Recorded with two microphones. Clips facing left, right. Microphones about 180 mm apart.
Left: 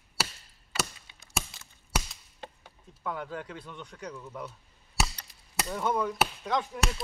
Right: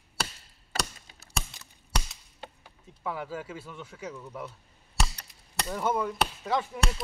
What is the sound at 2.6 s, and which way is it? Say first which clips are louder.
Speech: right 1 dB; 5° right (ahead or behind).